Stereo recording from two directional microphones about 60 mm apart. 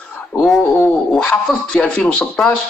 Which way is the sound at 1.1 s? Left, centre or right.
Centre.